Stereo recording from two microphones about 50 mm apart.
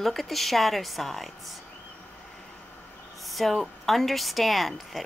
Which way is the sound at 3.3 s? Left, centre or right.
Centre.